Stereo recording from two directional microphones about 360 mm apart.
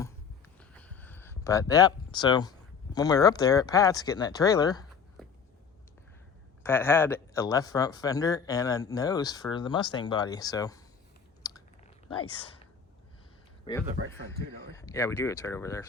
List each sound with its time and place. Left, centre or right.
0.0 s a sound: centre
6.6 s speech: centre
11.4 s chewing: centre
13.7 s speech: centre